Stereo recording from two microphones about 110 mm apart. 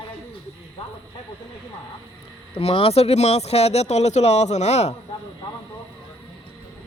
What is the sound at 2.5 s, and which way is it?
Speech, 60° left (ahead or behind).